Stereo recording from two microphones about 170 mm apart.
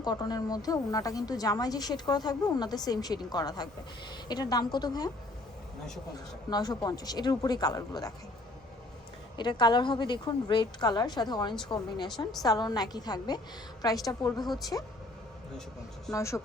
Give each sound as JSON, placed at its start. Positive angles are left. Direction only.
{"t": 0.0, "sound": "a woman's voice", "side_deg": 25}
{"t": 6.5, "sound": "a woman's voice", "side_deg": 25}
{"t": 9.4, "sound": "a woman's voice", "side_deg": 25}
{"t": 16.1, "sound": "speech", "side_deg": 15}